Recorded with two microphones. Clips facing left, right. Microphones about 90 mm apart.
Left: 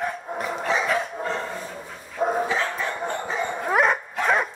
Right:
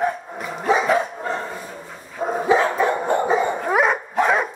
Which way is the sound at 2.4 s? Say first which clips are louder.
Right 8 dB; 20° right (ahead or behind).